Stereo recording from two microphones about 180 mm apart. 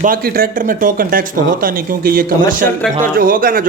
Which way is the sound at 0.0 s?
50° right (ahead or behind).